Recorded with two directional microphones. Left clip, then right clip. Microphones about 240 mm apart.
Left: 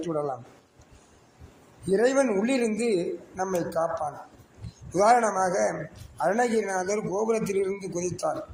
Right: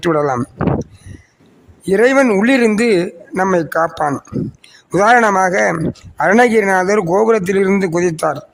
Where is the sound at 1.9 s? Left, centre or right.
Right.